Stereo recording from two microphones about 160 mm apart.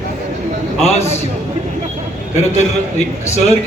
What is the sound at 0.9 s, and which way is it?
Speech, 40° left (ahead or behind).